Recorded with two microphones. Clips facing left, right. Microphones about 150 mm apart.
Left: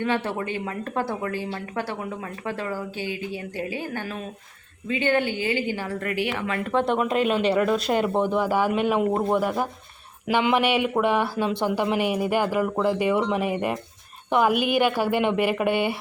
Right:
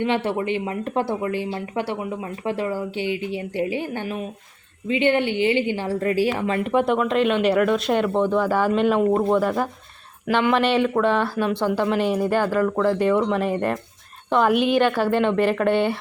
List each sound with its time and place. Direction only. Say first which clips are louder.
0.0 s a woman's voice: right 3 dB; 20° right (ahead or behind)
7.0 s speech: right 2 dB; 5° left (ahead or behind)